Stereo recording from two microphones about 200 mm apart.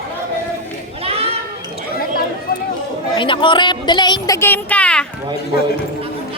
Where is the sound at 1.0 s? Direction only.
30° right (ahead or behind).